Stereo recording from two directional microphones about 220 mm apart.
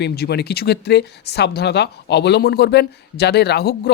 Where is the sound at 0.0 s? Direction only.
50° left (ahead or behind).